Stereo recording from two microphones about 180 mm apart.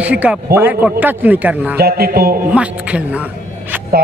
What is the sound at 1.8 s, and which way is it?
Speech, 60° right (ahead or behind).